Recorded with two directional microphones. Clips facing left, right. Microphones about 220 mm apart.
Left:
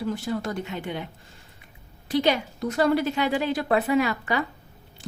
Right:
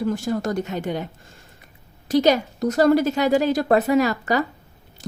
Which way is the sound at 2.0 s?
40° right (ahead or behind).